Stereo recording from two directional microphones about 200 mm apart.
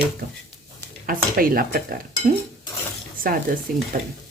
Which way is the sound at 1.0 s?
45° right (ahead or behind).